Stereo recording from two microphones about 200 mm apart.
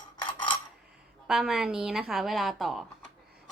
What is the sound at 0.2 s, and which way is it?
Cutlery, 25° left (ahead or behind).